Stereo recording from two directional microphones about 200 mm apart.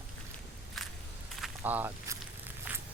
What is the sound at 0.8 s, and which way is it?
Crushing, centre (ahead or behind).